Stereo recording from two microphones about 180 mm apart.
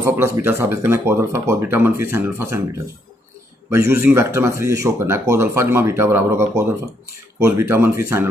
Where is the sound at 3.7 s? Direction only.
15° right (ahead or behind).